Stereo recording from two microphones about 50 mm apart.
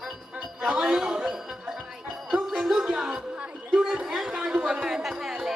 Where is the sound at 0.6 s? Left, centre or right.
Centre.